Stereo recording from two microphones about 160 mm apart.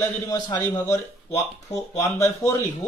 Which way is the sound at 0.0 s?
15° left (ahead or behind).